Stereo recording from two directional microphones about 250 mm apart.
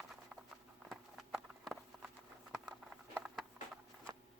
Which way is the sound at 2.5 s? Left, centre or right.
Centre.